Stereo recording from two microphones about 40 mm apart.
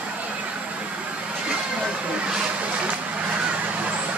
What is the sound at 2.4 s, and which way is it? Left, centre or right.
Vehicle, right.